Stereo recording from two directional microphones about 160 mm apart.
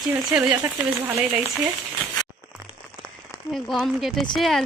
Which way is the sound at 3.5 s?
Centre (ahead or behind).